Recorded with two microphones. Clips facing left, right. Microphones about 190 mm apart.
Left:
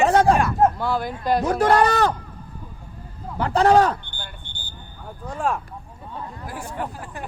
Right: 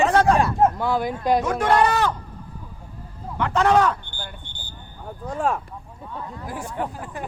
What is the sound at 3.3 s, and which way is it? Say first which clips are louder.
Speech: left 2 dB; 35° left (ahead or behind).